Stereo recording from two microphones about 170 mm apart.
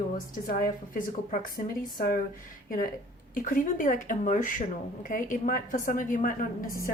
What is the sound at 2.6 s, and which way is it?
A woman's voice, 60° left (ahead or behind).